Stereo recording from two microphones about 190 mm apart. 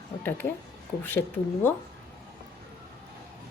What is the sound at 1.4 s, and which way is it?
Speech, 20° left (ahead or behind).